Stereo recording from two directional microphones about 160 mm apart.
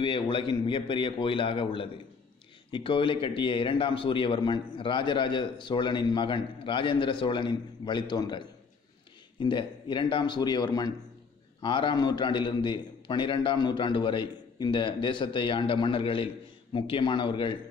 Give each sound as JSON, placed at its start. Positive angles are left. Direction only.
{"t": 0.0, "sound": "a man's voice", "side_deg": 30}